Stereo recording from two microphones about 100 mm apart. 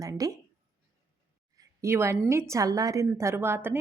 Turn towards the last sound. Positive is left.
turn(degrees=-20)  # may be behind; listen again after turning